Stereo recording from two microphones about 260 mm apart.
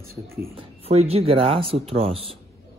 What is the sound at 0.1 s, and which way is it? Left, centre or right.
Speech, right.